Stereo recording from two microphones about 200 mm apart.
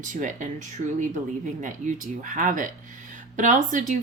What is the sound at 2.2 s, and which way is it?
A woman's voice, 40° right (ahead or behind).